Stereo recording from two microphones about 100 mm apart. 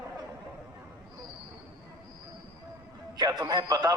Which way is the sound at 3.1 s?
40° right (ahead or behind).